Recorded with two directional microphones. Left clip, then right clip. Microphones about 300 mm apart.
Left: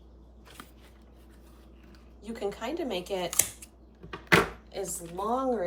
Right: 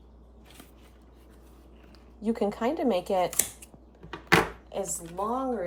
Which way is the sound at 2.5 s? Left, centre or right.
Right.